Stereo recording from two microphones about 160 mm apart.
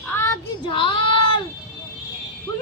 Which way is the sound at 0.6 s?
30° left (ahead or behind).